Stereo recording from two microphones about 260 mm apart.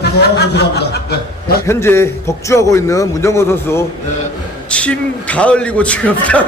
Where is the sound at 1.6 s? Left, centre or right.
Centre.